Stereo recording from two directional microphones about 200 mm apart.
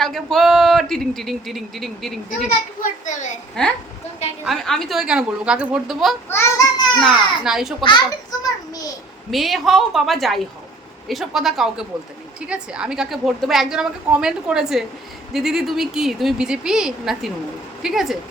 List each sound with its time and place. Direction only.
0.0 s a woman's voice: centre (ahead or behind)
2.8 s a woman's voice: 40° left (ahead or behind)
3.6 s a woman's voice: 5° left (ahead or behind)
6.2 s a sound: 15° left (ahead or behind)
7.0 s a woman's voice: centre (ahead or behind)
7.9 s a child's voice: 20° left (ahead or behind)
9.3 s a woman's voice: centre (ahead or behind)